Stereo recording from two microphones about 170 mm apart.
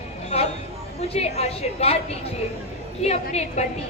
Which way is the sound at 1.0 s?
35° left (ahead or behind).